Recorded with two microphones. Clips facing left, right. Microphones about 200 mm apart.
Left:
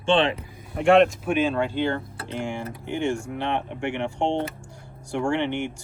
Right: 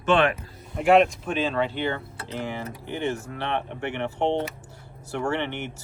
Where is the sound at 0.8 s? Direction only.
Centre (ahead or behind).